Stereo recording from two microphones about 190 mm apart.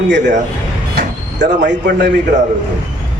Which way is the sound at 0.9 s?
70° right (ahead or behind).